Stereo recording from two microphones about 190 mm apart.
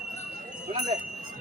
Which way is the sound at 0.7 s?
40° right (ahead or behind).